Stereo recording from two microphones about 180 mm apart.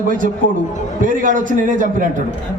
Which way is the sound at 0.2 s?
50° right (ahead or behind).